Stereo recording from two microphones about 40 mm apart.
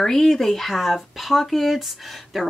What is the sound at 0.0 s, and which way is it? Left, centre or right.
Speech, centre.